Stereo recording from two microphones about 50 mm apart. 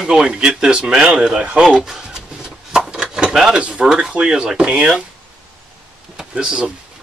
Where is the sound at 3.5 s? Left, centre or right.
Centre.